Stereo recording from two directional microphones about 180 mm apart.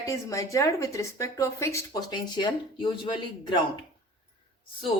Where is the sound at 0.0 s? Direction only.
15° left (ahead or behind).